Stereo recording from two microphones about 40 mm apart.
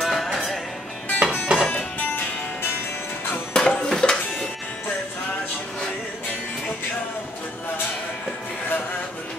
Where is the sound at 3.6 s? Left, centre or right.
Left.